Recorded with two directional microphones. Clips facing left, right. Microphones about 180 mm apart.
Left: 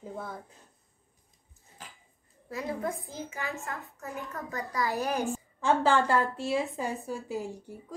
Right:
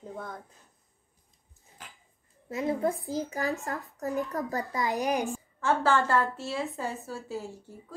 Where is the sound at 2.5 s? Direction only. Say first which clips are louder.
Right 5 dB; 20° right (ahead or behind).